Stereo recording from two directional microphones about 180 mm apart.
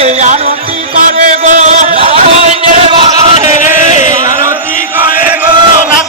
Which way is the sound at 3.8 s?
45° left (ahead or behind).